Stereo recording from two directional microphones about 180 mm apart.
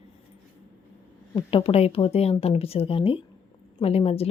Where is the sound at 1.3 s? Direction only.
30° left (ahead or behind).